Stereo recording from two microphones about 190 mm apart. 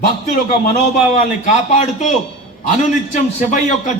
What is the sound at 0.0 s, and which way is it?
A man's voice, 45° left (ahead or behind).